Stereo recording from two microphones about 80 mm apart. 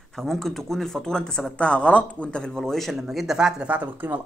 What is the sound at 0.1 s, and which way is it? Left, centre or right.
Speech, centre.